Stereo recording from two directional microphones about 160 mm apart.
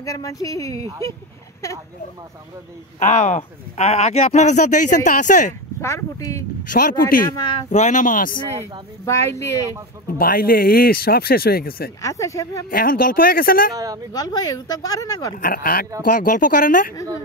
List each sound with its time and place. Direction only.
0.0 s speech: 20° left (ahead or behind)
3.0 s speech: 50° left (ahead or behind)
5.8 s speech: 15° left (ahead or behind)
6.7 s speech: 60° left (ahead or behind)
7.7 s speech: 50° left (ahead or behind)
9.0 s speech: 20° left (ahead or behind)
10.1 s speech: 65° left (ahead or behind)
12.0 s speech: 20° left (ahead or behind)
12.6 s speech: 65° left (ahead or behind)
13.7 s speech: 25° right (ahead or behind)
14.1 s speech: 25° left (ahead or behind)
15.3 s speech: 60° left (ahead or behind)